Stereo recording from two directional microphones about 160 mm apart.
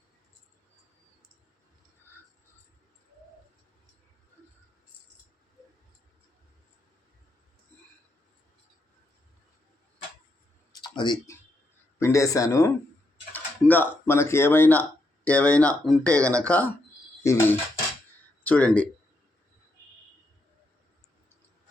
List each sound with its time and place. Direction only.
7.7 s a sound: 10° left (ahead or behind)
10.7 s clicking: 30° left (ahead or behind)
11.9 s speech: 20° left (ahead or behind)
13.3 s typing: 10° left (ahead or behind)
14.0 s speech: 15° left (ahead or behind)
18.4 s speech: 10° left (ahead or behind)